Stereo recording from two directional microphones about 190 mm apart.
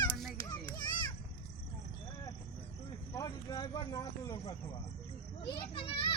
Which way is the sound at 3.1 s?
20° left (ahead or behind).